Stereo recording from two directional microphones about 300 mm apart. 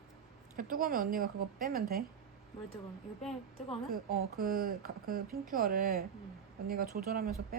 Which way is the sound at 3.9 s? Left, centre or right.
Right.